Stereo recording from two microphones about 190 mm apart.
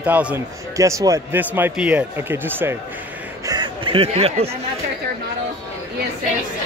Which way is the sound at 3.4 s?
25° right (ahead or behind).